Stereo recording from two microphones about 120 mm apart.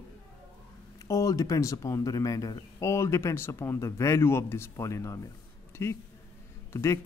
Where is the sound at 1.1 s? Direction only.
25° left (ahead or behind).